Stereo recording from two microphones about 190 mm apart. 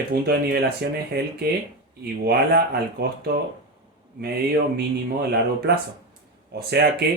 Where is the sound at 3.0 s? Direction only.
55° right (ahead or behind).